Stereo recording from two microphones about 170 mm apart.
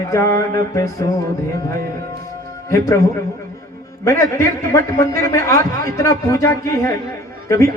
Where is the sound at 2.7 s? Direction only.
20° left (ahead or behind).